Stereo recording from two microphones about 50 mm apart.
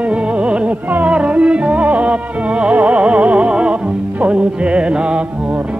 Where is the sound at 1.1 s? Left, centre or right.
Right.